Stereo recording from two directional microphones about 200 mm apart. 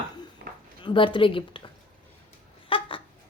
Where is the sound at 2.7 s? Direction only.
25° left (ahead or behind).